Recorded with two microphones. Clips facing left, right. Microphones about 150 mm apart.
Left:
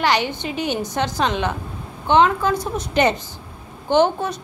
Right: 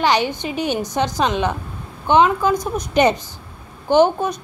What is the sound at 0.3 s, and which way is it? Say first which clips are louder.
A woman's voice: right 2 dB; 15° right (ahead or behind).